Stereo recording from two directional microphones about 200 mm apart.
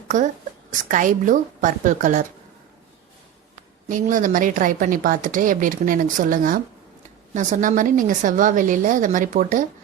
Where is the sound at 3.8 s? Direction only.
40° right (ahead or behind).